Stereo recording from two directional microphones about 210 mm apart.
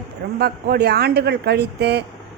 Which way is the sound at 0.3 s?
50° right (ahead or behind).